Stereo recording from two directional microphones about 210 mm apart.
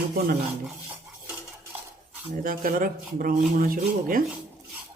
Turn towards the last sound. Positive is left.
turn(degrees=-40)  # may be behind; listen again after turning